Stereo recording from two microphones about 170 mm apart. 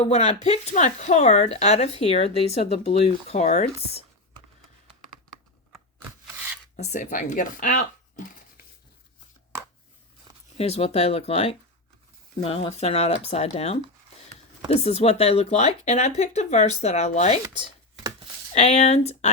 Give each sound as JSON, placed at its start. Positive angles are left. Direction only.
{"t": 0.0, "sound": "speech", "side_deg": 40}
{"t": 6.7, "sound": "speech", "side_deg": 45}
{"t": 10.3, "sound": "a sound", "side_deg": -25}
{"t": 10.6, "sound": "speech", "side_deg": 35}
{"t": 18.5, "sound": "speech", "side_deg": 40}